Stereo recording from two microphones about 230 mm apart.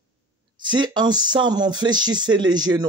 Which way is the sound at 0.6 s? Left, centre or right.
Centre.